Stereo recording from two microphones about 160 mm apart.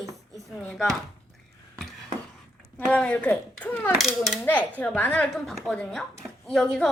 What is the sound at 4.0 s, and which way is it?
Speech, centre (ahead or behind).